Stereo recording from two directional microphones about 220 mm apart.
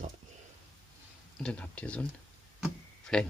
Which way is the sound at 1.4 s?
5° left (ahead or behind).